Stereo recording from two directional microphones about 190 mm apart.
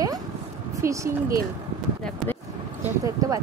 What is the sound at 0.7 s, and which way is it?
Speech, 15° right (ahead or behind).